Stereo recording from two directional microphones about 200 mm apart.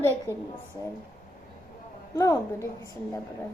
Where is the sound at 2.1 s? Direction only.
15° left (ahead or behind).